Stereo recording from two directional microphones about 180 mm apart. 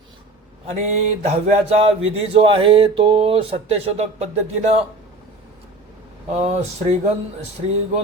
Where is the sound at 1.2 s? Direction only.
35° right (ahead or behind).